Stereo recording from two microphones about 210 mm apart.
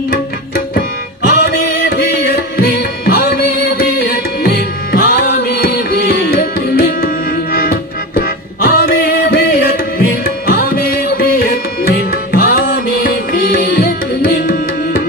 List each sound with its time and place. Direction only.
1.3 s music: 50° left (ahead or behind)